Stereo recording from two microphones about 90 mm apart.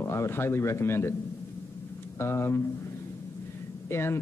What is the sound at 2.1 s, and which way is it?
Speech, 30° left (ahead or behind).